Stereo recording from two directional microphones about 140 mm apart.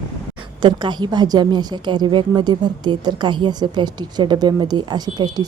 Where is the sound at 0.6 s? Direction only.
35° right (ahead or behind).